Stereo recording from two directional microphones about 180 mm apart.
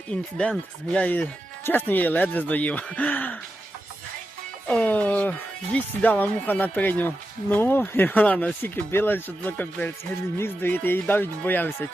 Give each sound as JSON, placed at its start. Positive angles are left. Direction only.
{"t": 0.1, "sound": "speech", "side_deg": 5}
{"t": 4.7, "sound": "speech", "side_deg": 5}